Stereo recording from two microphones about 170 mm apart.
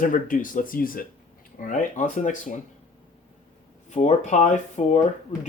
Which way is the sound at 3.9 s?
40° left (ahead or behind).